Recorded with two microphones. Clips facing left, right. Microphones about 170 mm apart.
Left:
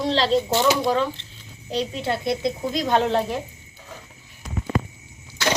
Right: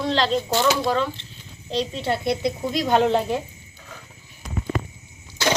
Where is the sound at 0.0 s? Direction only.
30° left (ahead or behind).